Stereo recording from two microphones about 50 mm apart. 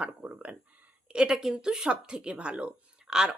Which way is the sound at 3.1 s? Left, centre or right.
Centre.